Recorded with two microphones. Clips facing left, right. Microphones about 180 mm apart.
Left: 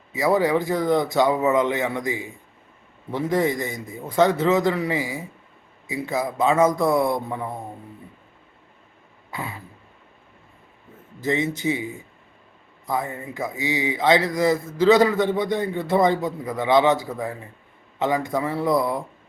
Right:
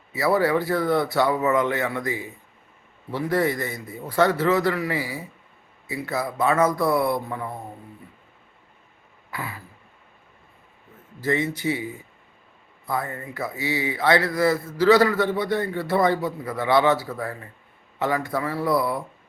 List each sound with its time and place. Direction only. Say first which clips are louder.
0.1 s a man's voice: left 1 dB; 15° left (ahead or behind)
9.3 s throat clearing: left 1 dB; 25° left (ahead or behind)
11.2 s speech: left 1 dB; 20° left (ahead or behind)
12.9 s speech: left 2 dB; 20° left (ahead or behind)